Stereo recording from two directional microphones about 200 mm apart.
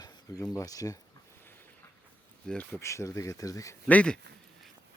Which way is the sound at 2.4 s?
5° left (ahead or behind).